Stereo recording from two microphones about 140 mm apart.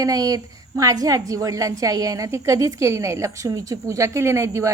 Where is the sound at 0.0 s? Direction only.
25° right (ahead or behind).